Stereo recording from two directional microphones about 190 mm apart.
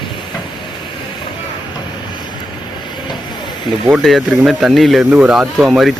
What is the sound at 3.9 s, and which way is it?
Speech, centre (ahead or behind).